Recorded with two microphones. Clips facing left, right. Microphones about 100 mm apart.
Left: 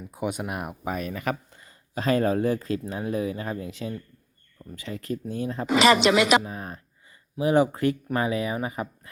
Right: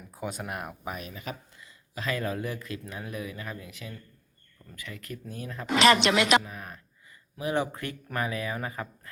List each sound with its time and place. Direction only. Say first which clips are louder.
0.1 s speech: left 5 dB; 15° left (ahead or behind)
0.9 s speech: left 9 dB; 45° left (ahead or behind)
1.1 s speech: left 10 dB; 60° left (ahead or behind)
1.5 s speech: left 7 dB; 35° left (ahead or behind)
5.6 s a woman's voice: left 3 dB; 5° left (ahead or behind)
6.4 s speech: left 6 dB; 30° left (ahead or behind)